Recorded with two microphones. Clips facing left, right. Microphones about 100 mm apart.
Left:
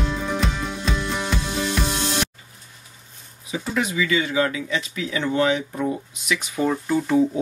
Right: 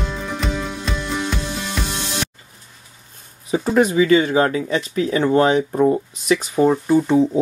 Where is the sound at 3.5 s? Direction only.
45° right (ahead or behind).